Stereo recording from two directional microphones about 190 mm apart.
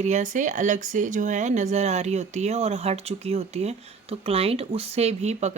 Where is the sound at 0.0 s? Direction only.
40° right (ahead or behind).